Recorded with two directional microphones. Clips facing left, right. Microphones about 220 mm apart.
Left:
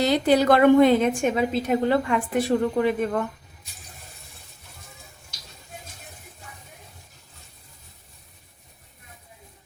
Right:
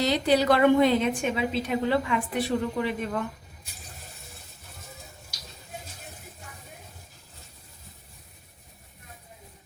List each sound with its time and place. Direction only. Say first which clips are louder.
0.0 s a woman's voice: left 4 dB; 50° left (ahead or behind)